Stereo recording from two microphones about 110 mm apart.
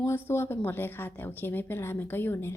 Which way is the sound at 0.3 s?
20° left (ahead or behind).